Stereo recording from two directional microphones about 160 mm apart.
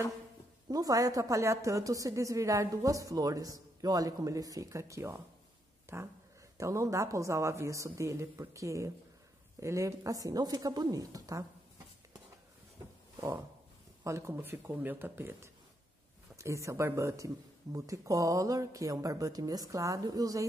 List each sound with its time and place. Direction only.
0.7 s a woman's voice: 20° right (ahead or behind)
5.9 s dog: 15° right (ahead or behind)
6.6 s a woman's voice: 20° right (ahead or behind)
14.0 s a woman's voice: 20° right (ahead or behind)